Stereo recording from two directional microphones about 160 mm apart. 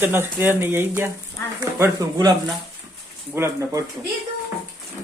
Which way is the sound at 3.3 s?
20° right (ahead or behind).